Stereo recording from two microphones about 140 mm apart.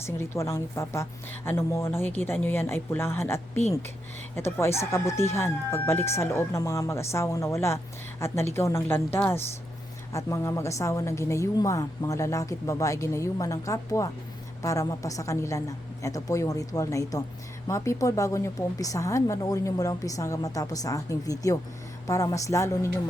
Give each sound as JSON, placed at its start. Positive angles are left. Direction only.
{"t": 0.0, "sound": "a woman's voice", "side_deg": 20}
{"t": 4.6, "sound": "a woman's voice", "side_deg": 20}